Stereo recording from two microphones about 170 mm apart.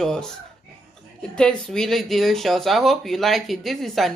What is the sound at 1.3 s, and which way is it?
Speech, 5° left (ahead or behind).